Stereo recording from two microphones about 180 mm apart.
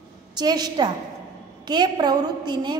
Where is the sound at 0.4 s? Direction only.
20° right (ahead or behind).